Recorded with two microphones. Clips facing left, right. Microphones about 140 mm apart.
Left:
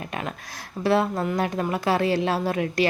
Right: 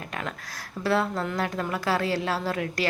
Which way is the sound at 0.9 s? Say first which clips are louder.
Left 4 dB; 20° left (ahead or behind).